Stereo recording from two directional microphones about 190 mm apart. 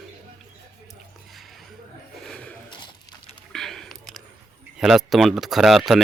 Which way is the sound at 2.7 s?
25° left (ahead or behind).